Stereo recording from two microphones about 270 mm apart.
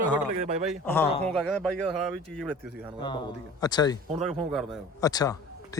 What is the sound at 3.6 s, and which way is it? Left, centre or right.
Speech, centre.